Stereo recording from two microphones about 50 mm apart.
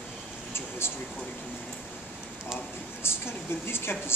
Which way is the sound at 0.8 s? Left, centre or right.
Left.